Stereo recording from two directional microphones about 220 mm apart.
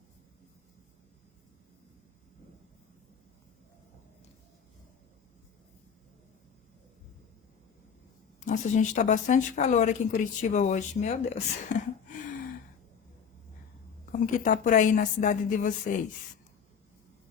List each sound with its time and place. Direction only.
8.4 s speech: 35° left (ahead or behind)
14.1 s speech: 40° left (ahead or behind)